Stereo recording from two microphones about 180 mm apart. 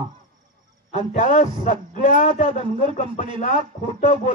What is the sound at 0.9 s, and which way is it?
A man's voice, 45° left (ahead or behind).